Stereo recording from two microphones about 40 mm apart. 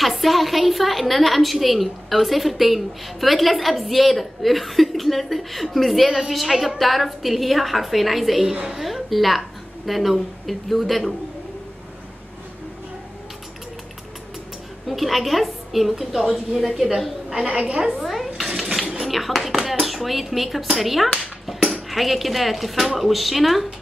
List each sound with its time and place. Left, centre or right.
0.0 s a woman's voice: centre
14.9 s a woman's voice: centre
17.3 s a woman's voice: centre
18.0 s dishes: centre
18.9 s a sound: centre
19.6 s a woman's voice: centre